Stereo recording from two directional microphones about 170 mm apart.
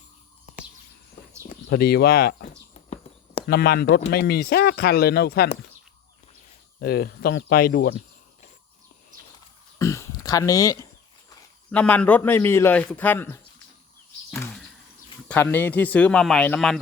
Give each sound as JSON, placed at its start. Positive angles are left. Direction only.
{"t": 1.6, "sound": "speech", "side_deg": 70}
{"t": 2.7, "sound": "horse", "side_deg": 45}
{"t": 3.4, "sound": "speech", "side_deg": 65}
{"t": 6.7, "sound": "speech", "side_deg": 65}
{"t": 9.7, "sound": "a sound", "side_deg": 20}
{"t": 11.7, "sound": "a man's voice", "side_deg": 10}
{"t": 14.3, "sound": "a sound", "side_deg": 5}
{"t": 15.3, "sound": "a man's voice", "side_deg": 10}